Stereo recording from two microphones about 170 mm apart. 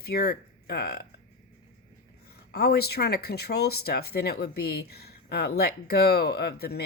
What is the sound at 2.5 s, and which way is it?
Speech, 70° left (ahead or behind).